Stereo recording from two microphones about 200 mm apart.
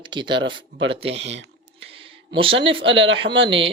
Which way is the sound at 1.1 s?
60° right (ahead or behind).